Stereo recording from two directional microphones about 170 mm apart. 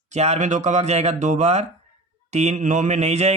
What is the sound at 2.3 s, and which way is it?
Mantra, 40° right (ahead or behind).